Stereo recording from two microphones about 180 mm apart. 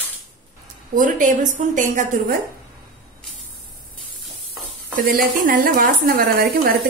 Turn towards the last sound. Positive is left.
turn(degrees=-55)  # may be behind; listen again after turning